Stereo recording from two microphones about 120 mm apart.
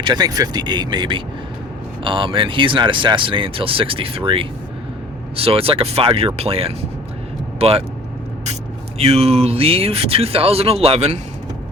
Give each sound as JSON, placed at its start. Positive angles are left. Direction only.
{"t": 0.0, "sound": "speech", "side_deg": -35}
{"t": 9.0, "sound": "speech", "side_deg": -55}